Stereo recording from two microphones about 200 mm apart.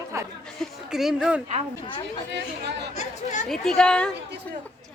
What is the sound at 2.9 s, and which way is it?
Speech, 35° left (ahead or behind).